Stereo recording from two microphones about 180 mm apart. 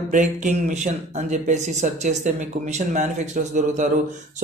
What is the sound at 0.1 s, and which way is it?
Speech, 45° right (ahead or behind).